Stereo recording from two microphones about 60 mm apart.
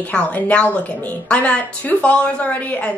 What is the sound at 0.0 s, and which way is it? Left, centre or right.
A woman's voice, left.